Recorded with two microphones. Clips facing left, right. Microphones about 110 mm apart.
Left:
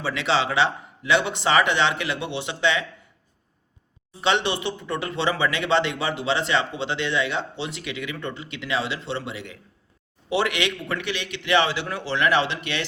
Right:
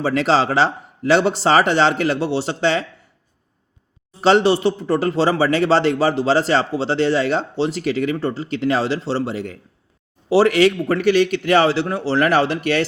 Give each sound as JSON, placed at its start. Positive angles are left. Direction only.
{"t": 0.0, "sound": "a man's voice", "side_deg": -40}
{"t": 4.2, "sound": "a man's voice", "side_deg": -40}